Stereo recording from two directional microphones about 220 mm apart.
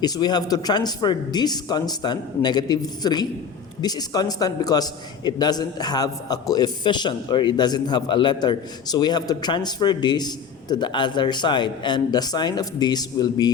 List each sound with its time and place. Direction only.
0.0 s a man's voice: 20° left (ahead or behind)